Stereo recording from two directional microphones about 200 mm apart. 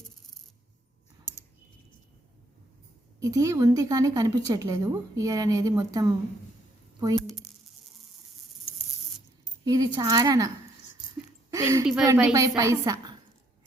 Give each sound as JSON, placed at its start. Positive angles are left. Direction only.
{"t": 3.2, "sound": "a woman's voice", "side_deg": -15}
{"t": 7.2, "sound": "speech", "side_deg": 0}
{"t": 9.6, "sound": "a woman's voice", "side_deg": -20}
{"t": 11.5, "sound": "a woman's voice", "side_deg": -15}